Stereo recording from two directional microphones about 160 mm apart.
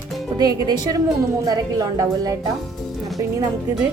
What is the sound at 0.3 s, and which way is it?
A woman's voice, 25° right (ahead or behind).